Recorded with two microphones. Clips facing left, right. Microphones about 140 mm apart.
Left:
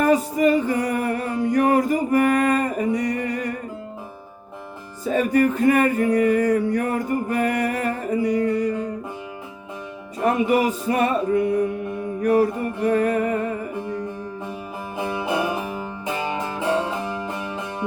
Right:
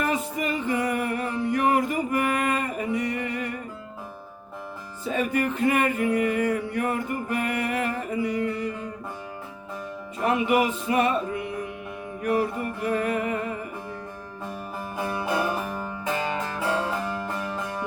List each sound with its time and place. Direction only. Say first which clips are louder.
0.0 s music: left 9 dB; 40° left (ahead or behind)
5.0 s music: left 6 dB; 40° left (ahead or behind)
10.2 s music: left 3 dB; 40° left (ahead or behind)
14.9 s music: left 3 dB; 20° left (ahead or behind)